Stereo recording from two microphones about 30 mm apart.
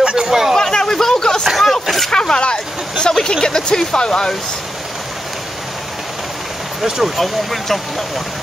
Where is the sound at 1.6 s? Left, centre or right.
Centre.